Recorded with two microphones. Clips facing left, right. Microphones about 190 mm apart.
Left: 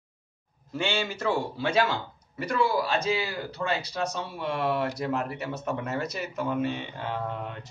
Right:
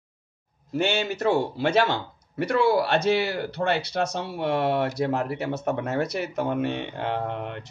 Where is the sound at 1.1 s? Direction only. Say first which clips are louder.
Right 5 dB; 65° right (ahead or behind).